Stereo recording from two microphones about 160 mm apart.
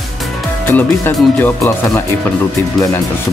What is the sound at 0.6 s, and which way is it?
Speech, 10° left (ahead or behind).